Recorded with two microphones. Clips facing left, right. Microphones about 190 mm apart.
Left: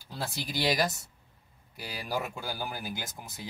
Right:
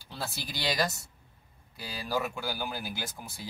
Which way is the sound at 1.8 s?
15° left (ahead or behind).